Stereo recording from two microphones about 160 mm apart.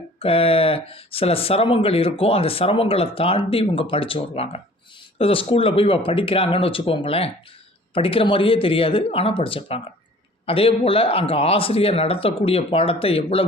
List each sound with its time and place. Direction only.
0.2 s speech: 35° left (ahead or behind)